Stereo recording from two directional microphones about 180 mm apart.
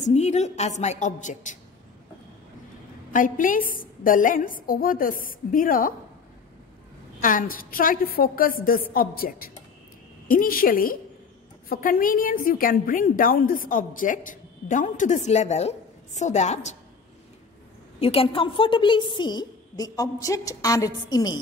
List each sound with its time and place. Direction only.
0.0 s a woman's voice: 40° left (ahead or behind)
3.1 s a woman's voice: 50° left (ahead or behind)
7.2 s a woman's voice: 50° left (ahead or behind)
18.0 s a woman's voice: 30° left (ahead or behind)